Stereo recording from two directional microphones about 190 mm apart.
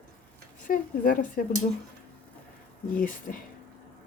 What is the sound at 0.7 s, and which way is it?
Speech, 45° left (ahead or behind).